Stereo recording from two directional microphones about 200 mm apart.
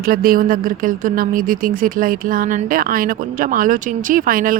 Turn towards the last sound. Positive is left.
turn(degrees=-45)  # may be behind; listen again after turning